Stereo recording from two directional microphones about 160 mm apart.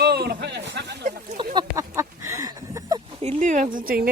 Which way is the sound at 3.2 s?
50° right (ahead or behind).